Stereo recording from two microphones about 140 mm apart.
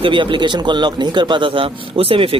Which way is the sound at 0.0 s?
35° right (ahead or behind).